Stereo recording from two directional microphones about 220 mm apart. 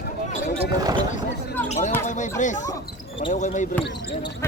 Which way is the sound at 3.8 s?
50° left (ahead or behind).